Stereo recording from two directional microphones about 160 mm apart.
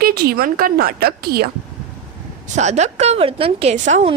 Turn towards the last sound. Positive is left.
turn(degrees=-45)  # may be behind; listen again after turning